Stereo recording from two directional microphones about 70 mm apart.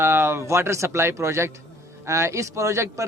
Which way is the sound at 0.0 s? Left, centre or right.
Right.